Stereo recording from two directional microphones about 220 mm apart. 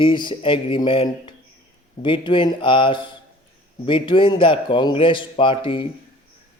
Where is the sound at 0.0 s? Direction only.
20° left (ahead or behind).